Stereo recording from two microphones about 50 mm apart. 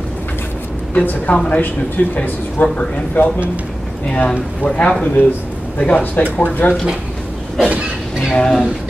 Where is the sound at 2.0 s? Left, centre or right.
Left.